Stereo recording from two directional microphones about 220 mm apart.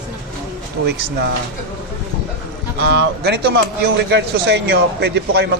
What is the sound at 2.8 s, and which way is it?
Speech, 50° right (ahead or behind).